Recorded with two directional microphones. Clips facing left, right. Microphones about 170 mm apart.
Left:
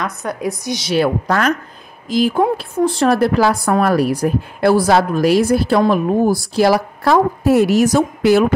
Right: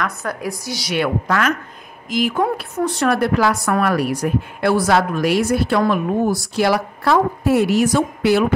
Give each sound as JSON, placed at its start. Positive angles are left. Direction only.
{"t": 0.0, "sound": "a woman's voice", "side_deg": 20}
{"t": 0.9, "sound": "a woman's voice", "side_deg": 35}